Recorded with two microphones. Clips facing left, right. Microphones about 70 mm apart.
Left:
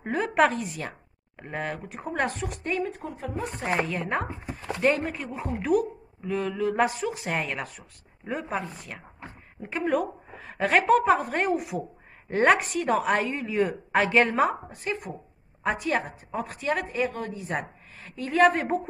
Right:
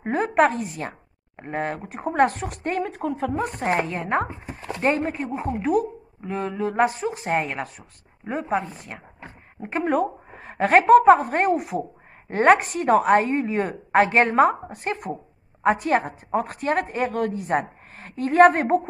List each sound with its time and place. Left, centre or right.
0.0 s speech: right
3.3 s a woman's voice: right
3.8 s speech: right
8.5 s a woman's voice: centre
9.6 s a woman's voice: right